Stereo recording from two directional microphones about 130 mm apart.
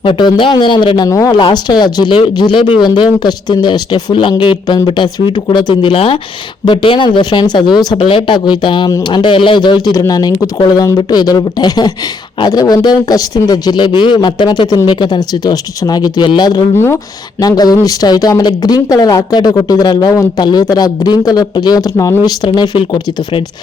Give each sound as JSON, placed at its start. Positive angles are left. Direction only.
{"t": 0.0, "sound": "speech", "side_deg": 40}
{"t": 1.4, "sound": "speech", "side_deg": 35}
{"t": 22.4, "sound": "speech", "side_deg": 35}